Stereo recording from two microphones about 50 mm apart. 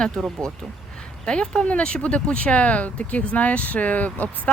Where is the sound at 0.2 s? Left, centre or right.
Centre.